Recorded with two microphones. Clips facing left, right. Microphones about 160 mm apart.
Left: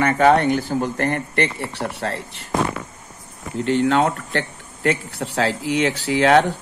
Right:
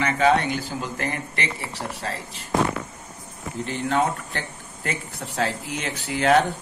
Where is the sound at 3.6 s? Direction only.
80° left.